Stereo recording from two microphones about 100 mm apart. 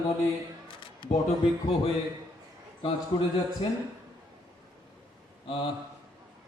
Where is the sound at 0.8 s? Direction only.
55° left (ahead or behind).